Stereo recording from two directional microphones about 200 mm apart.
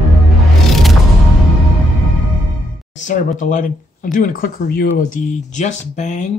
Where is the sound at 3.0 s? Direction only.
40° left (ahead or behind).